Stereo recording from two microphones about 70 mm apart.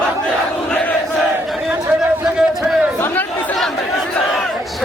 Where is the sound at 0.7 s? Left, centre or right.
Left.